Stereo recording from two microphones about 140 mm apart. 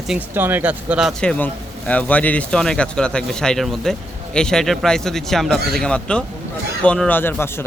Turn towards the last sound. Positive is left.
turn(degrees=15)  # may be behind; listen again after turning